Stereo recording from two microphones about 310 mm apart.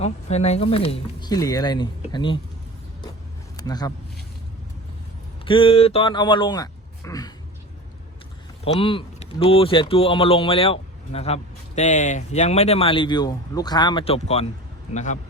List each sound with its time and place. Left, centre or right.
0.0 s speech: left
3.6 s speech: centre
5.5 s speech: centre
8.6 s a man's voice: centre